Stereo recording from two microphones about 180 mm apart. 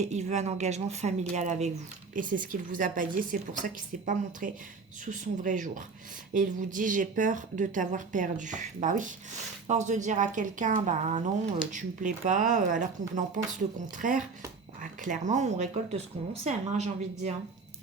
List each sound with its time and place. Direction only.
0.0 s speech: 40° right (ahead or behind)